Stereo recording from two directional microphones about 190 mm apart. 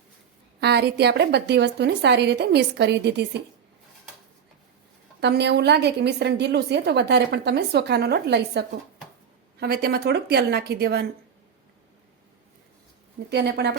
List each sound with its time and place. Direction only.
0.6 s a woman's voice: 60° right (ahead or behind)
5.2 s a woman's voice: 60° right (ahead or behind)
13.3 s a woman's voice: 60° right (ahead or behind)